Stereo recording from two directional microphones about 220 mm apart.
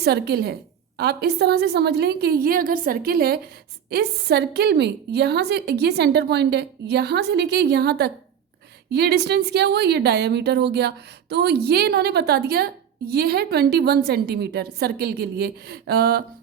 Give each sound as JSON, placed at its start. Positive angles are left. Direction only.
{"t": 0.0, "sound": "a woman's voice", "side_deg": -45}